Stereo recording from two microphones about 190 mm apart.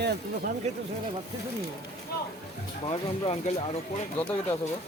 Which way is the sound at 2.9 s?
30° left (ahead or behind).